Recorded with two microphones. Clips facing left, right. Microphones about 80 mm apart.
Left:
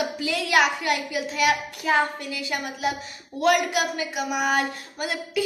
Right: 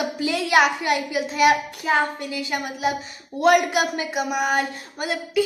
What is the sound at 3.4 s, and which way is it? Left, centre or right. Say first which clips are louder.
Speech: right 4 dB; right.